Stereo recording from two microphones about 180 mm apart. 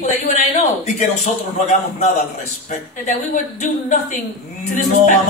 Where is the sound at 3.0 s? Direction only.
40° left (ahead or behind).